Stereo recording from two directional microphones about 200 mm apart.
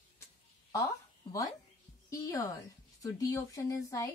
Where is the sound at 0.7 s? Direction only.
15° left (ahead or behind).